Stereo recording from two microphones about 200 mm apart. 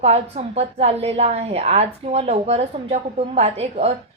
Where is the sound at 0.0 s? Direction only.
30° right (ahead or behind).